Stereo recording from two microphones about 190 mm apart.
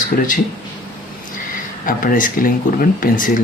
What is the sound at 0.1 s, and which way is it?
Speech, 50° left (ahead or behind).